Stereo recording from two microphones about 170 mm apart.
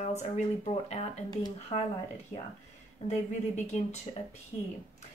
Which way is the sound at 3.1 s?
40° left (ahead or behind).